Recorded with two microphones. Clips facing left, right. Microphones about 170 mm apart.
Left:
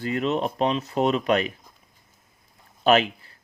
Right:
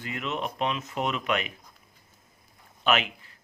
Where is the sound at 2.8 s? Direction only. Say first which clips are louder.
Left 7 dB; 35° left (ahead or behind).